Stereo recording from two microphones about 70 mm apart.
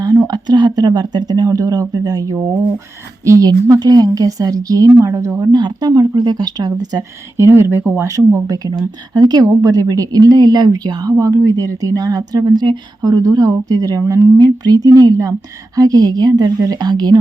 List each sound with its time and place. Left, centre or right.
0.0 s speech: right
2.3 s speech: right
3.2 s speech: right
5.5 s speech: right
7.3 s speech: right
8.0 s speech: right
9.1 s speech: right
11.2 s speech: right
14.1 s speech: right
14.4 s speech: right